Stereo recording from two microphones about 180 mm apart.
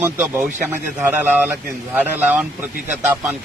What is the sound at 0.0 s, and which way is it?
A man's voice, 15° right (ahead or behind).